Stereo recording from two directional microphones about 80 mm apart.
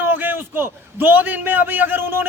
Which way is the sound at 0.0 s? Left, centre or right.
Right.